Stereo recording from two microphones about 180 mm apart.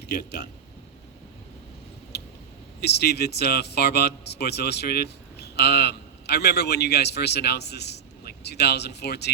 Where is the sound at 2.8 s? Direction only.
65° left (ahead or behind).